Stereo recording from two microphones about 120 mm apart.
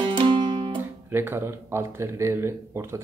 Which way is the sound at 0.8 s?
15° right (ahead or behind).